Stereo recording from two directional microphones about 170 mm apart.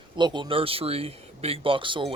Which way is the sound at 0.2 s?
25° right (ahead or behind).